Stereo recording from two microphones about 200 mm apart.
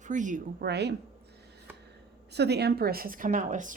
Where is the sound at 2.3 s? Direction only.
55° right (ahead or behind); by 3.7 s 40° right (ahead or behind).